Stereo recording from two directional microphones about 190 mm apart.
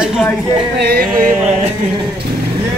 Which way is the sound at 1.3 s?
5° right (ahead or behind).